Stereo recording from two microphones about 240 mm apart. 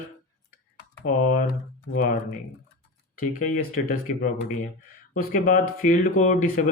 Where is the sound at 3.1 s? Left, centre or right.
Left.